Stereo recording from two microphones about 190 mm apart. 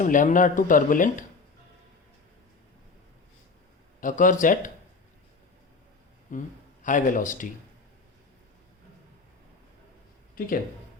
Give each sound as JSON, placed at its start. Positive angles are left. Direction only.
{"t": 0.0, "sound": "speech", "side_deg": 45}
{"t": 4.0, "sound": "speech", "side_deg": 45}
{"t": 6.3, "sound": "speech", "side_deg": 45}
{"t": 10.3, "sound": "speech", "side_deg": 45}